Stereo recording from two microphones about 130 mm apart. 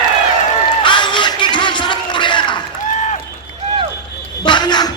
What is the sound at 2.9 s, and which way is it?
Run, 65° left (ahead or behind).